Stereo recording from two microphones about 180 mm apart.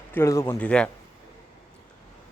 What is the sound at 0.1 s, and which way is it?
Speech, 15° left (ahead or behind).